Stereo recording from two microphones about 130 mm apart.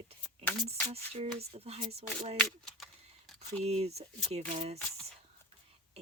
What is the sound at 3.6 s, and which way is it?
Speech, 55° right (ahead or behind).